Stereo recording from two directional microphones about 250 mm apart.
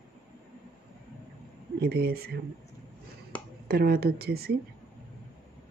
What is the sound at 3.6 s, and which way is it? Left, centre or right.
Speech, right.